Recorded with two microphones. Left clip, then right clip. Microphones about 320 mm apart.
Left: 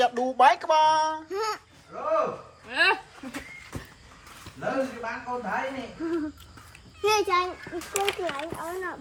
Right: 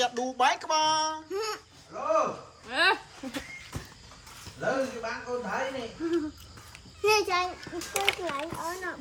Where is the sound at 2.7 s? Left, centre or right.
Centre.